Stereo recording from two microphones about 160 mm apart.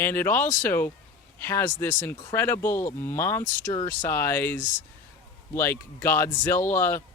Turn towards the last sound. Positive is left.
turn(degrees=15)  # may be behind; listen again after turning